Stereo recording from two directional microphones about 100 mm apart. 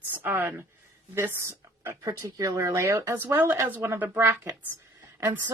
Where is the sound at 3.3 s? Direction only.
20° right (ahead or behind).